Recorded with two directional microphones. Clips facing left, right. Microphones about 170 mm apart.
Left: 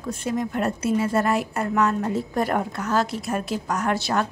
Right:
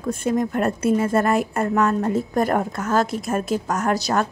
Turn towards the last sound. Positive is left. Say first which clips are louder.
# right 2 dB
turn(degrees=-45)  # may be behind; listen again after turning